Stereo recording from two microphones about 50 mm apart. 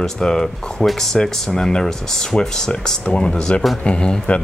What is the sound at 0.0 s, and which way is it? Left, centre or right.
Speech, centre.